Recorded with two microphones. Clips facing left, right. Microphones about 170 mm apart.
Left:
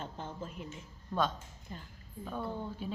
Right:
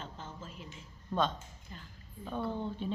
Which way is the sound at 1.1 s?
Centre (ahead or behind).